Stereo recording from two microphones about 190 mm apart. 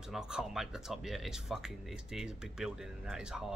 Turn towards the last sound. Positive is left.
turn(degrees=-5)  # may be behind; listen again after turning